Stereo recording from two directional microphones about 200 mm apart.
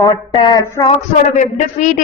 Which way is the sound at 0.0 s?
20° left (ahead or behind).